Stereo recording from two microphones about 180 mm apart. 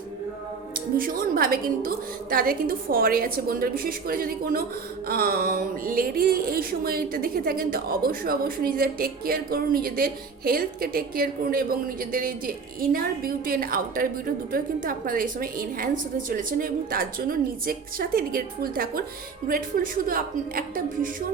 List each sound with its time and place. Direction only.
0.9 s a woman's voice: 50° right (ahead or behind)